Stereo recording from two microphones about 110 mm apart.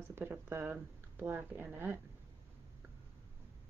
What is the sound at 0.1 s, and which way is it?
Speech, 20° right (ahead or behind).